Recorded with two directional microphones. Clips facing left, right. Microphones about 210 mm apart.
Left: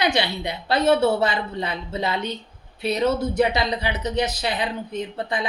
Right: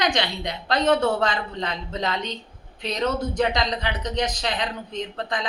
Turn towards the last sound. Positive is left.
turn(degrees=10)  # may be behind; listen again after turning